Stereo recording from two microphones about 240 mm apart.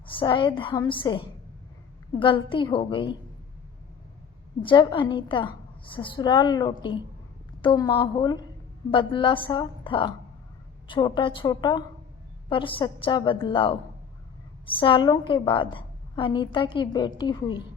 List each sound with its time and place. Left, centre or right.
0.1 s a woman's voice: centre
4.6 s a woman's voice: centre